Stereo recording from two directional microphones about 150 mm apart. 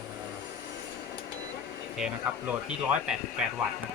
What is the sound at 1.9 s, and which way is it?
Speech, 5° right (ahead or behind).